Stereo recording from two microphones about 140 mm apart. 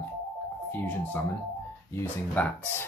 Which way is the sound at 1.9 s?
15° left (ahead or behind).